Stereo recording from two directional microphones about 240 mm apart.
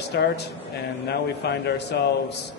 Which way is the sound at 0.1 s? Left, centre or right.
Left.